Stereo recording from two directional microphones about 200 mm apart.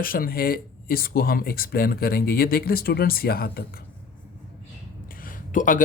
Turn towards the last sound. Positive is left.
turn(degrees=40)  # may be behind; listen again after turning